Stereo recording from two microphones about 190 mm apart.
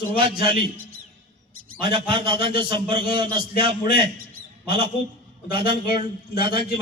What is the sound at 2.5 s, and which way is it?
Speech, 50° left (ahead or behind).